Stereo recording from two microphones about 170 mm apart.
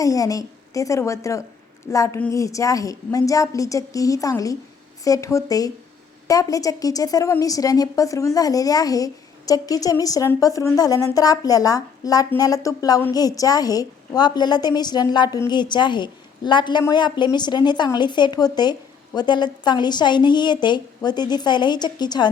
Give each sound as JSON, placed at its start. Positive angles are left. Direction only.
{"t": 0.0, "sound": "a woman's voice", "side_deg": 20}